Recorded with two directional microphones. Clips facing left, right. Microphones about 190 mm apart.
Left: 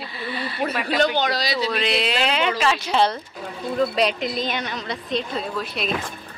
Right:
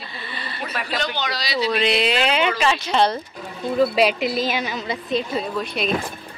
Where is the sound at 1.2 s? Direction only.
50° left (ahead or behind).